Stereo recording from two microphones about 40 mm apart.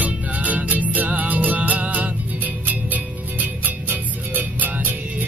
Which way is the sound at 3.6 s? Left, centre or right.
Right.